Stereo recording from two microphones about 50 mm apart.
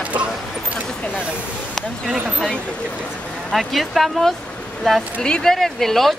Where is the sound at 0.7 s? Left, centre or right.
Left.